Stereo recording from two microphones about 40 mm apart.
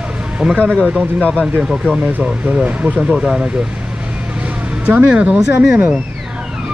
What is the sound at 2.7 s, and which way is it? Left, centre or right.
Speech, right.